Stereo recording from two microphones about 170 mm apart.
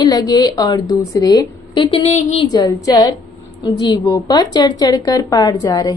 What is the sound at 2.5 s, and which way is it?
A woman's voice, 25° left (ahead or behind).